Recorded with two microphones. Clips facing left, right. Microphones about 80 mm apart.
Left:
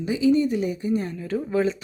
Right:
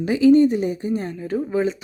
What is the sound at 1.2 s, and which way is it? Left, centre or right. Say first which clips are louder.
Speech: right 2 dB; centre.